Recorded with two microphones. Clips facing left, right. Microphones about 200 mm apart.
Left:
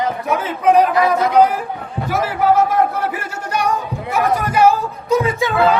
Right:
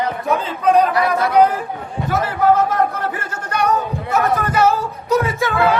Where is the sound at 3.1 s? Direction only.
10° left (ahead or behind).